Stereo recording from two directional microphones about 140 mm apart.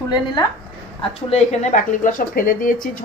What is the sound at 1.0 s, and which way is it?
Speech, 50° left (ahead or behind).